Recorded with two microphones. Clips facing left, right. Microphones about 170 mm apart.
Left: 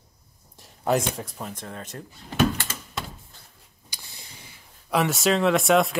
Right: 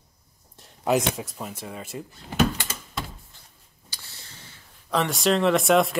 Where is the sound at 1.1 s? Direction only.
5° right (ahead or behind).